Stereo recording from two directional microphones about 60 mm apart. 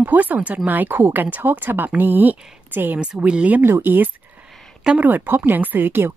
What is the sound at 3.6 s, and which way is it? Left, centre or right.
A woman's voice, right.